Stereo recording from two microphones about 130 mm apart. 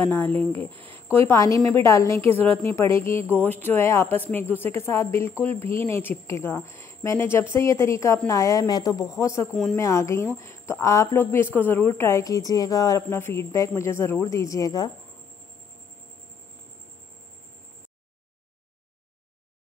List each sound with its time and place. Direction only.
0.0 s a woman's voice: 15° left (ahead or behind)
0.7 s a sound: 40° right (ahead or behind)
1.1 s a woman's voice: 20° left (ahead or behind)